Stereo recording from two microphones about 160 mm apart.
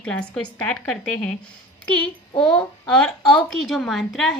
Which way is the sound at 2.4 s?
5° left (ahead or behind).